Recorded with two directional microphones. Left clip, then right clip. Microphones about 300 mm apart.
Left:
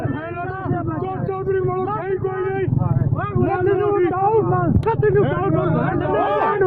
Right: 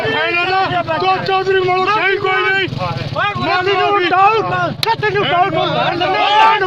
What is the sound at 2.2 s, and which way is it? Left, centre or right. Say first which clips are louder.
Vehicle: right 8 dB; right.